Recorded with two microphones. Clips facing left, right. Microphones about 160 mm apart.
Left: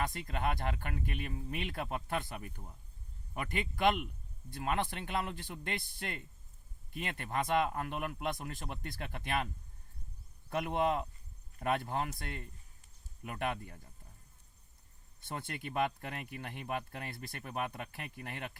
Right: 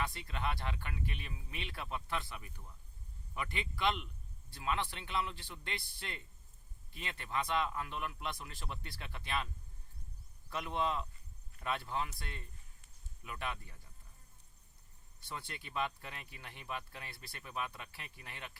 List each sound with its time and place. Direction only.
0.0 s speech: 50° left (ahead or behind)
10.5 s speech: 55° left (ahead or behind)
15.2 s speech: 50° left (ahead or behind)